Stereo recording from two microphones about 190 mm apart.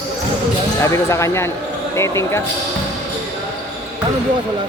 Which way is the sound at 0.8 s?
15° left (ahead or behind).